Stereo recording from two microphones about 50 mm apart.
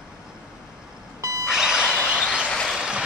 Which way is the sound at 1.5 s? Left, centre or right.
Centre.